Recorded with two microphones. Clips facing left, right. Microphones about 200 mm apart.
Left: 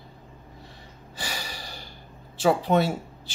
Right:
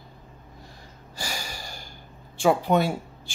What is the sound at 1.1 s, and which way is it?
Gasp, centre (ahead or behind).